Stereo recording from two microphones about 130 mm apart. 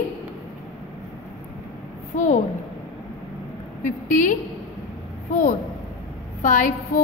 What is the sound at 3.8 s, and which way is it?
Speech, 80° left.